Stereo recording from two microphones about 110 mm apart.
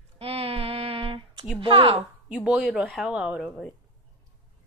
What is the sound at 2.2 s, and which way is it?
A woman's voice, 10° right (ahead or behind).